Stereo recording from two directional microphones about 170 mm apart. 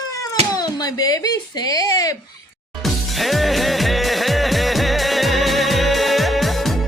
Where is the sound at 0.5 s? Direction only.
20° left (ahead or behind).